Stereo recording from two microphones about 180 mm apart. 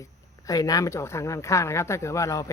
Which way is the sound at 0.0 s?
20° left (ahead or behind).